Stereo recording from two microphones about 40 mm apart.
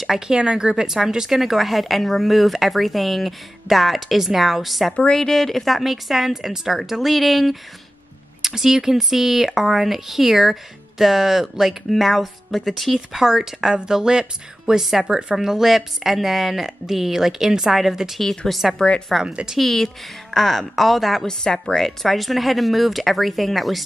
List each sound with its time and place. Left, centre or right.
0.3 s a woman's voice: centre
5.1 s a woman's voice: centre
8.4 s a woman's voice: centre
12.9 s a woman's voice: centre
18.8 s speech: left
19.2 s a woman's voice: right
19.6 s a woman's voice: centre
21.3 s a woman's voice: centre